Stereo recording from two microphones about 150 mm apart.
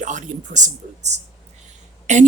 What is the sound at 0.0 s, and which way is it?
A woman's voice, 55° right (ahead or behind).